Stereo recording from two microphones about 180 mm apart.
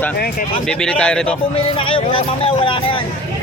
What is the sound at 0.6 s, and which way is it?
Speech, 5° left (ahead or behind).